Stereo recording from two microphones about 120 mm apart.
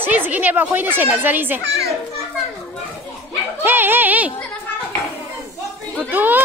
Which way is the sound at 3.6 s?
15° right (ahead or behind).